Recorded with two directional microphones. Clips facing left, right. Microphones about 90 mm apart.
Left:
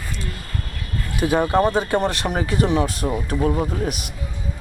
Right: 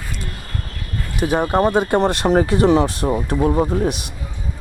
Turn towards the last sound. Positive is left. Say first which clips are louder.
# right 4 dB
turn(degrees=-25)  # may be behind; listen again after turning